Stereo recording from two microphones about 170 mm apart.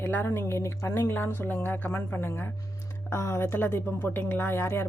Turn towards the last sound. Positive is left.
turn(degrees=15)  # may be behind; listen again after turning